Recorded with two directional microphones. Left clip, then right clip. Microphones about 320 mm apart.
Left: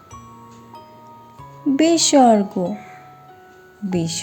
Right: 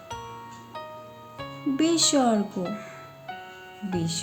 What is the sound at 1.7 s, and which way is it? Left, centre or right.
Speech, centre.